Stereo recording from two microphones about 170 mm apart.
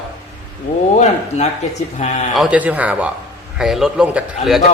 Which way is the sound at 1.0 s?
40° left (ahead or behind).